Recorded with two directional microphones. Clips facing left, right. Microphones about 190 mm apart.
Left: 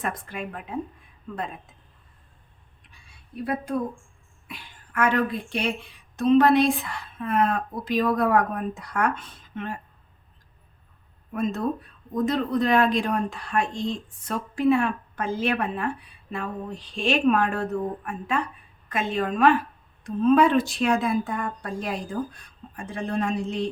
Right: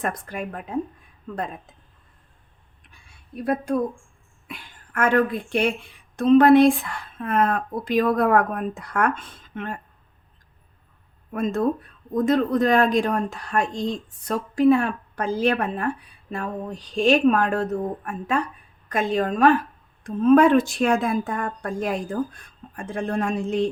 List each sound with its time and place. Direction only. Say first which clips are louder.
0.0 s a woman's voice: right 3 dB; 40° right (ahead or behind)
4.4 s speech: right 3 dB; 50° right (ahead or behind)
12.1 s a woman's voice: right 4 dB; 50° right (ahead or behind)